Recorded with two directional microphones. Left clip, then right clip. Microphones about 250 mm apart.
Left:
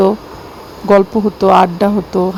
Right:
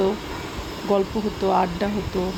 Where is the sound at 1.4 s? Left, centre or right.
Left.